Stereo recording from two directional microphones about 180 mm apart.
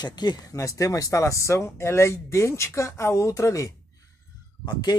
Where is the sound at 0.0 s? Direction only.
25° left (ahead or behind).